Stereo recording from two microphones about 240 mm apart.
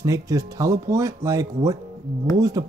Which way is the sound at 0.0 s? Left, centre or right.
Centre.